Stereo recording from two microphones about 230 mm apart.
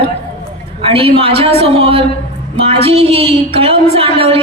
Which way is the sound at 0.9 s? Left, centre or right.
Right.